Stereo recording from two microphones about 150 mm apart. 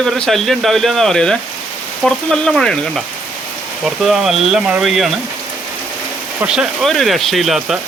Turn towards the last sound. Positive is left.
turn(degrees=0)  # may be behind; listen again after turning